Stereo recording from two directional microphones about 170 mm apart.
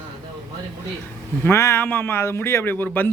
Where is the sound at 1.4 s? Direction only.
15° left (ahead or behind).